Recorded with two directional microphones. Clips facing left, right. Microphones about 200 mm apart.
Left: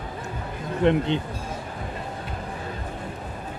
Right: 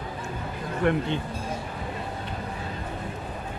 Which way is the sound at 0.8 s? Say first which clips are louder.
Left 4 dB; 20° left (ahead or behind).